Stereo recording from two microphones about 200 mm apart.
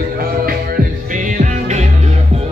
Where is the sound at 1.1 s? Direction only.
40° right (ahead or behind).